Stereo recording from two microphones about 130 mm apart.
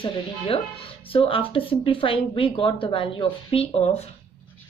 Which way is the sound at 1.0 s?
45° left (ahead or behind).